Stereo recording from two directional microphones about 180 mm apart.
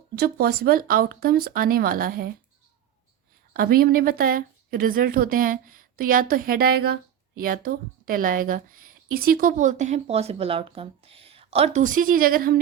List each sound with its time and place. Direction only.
0.2 s speech: 60° right (ahead or behind)
3.5 s speech: 55° right (ahead or behind)